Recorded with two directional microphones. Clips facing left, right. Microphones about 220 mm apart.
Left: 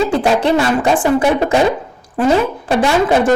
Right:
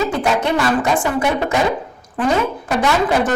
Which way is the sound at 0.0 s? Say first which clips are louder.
Left 4 dB; 30° left (ahead or behind).